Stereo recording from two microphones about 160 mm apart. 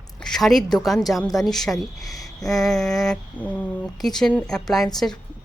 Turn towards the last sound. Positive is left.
turn(degrees=0)  # may be behind; listen again after turning